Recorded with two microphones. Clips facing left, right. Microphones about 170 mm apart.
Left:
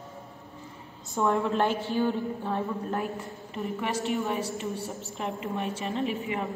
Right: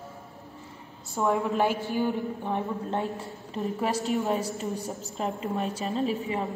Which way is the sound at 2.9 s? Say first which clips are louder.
Right 1 dB; 25° right (ahead or behind).